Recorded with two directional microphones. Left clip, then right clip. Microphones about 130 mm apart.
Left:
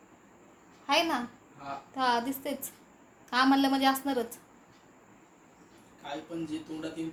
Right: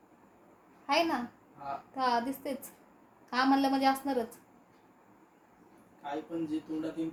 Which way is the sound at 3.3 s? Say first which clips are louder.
Left 2 dB; 5° left (ahead or behind).